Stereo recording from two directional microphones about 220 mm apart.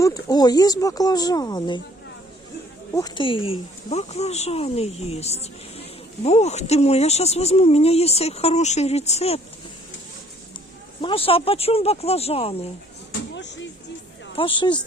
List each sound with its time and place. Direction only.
0.0 s speech: 15° left (ahead or behind)
2.9 s speech: 20° left (ahead or behind)
11.0 s speech: 25° left (ahead or behind)
13.3 s speech: 55° left (ahead or behind)
14.3 s speech: 20° left (ahead or behind)